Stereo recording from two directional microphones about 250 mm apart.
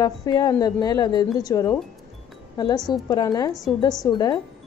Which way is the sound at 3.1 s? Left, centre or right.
Centre.